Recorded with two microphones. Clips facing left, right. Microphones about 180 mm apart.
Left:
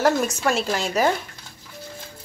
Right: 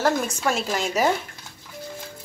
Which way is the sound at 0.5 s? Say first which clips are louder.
Left 1 dB; centre (ahead or behind).